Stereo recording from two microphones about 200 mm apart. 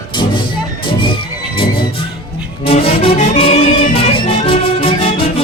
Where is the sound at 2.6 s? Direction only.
30° left (ahead or behind).